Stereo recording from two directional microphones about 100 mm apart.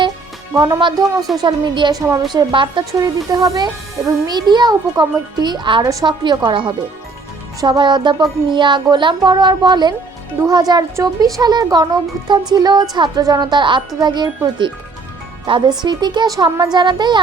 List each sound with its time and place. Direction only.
0.5 s speech: 40° right (ahead or behind)
1.4 s music: 50° right (ahead or behind)
2.0 s music: 35° right (ahead or behind); by 2.8 s 55° right (ahead or behind)
3.0 s speech: 40° right (ahead or behind)
4.3 s music: 45° right (ahead or behind)
5.8 s speech: 35° right (ahead or behind)
6.1 s music: 50° right (ahead or behind)
10.4 s speech: 40° right (ahead or behind)
11.3 s music: 40° right (ahead or behind)
15.4 s speech: 60° right (ahead or behind)
15.8 s music: 45° right (ahead or behind)
16.7 s music: 50° right (ahead or behind)